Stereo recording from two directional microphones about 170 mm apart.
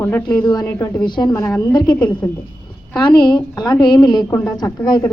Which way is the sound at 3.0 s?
25° left (ahead or behind).